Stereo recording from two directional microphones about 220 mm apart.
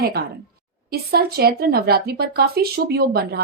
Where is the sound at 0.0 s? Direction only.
45° right (ahead or behind).